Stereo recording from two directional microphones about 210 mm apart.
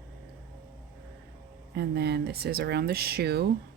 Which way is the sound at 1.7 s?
50° right (ahead or behind).